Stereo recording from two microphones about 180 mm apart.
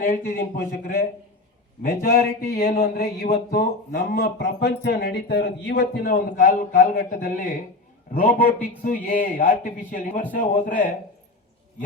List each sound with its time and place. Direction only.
0.0 s a man's voice: 55° left (ahead or behind)